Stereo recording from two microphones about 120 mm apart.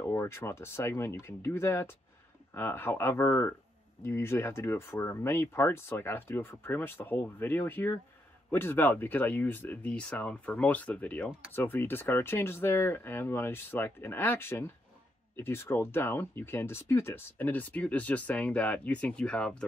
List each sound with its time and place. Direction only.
0.0 s speech: 20° left (ahead or behind)